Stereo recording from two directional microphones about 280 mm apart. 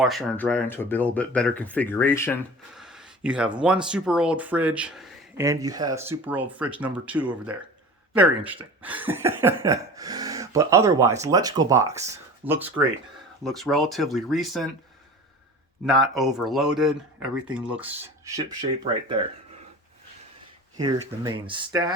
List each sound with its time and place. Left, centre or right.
0.0 s speech: centre
2.7 s a sound: centre
3.6 s speech: centre
15.9 s speech: centre
20.7 s speech: centre